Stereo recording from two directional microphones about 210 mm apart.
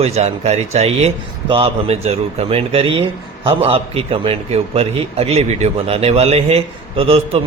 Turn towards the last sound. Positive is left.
turn(degrees=-30)  # may be behind; listen again after turning